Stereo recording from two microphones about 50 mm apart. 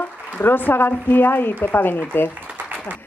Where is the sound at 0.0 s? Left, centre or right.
Left.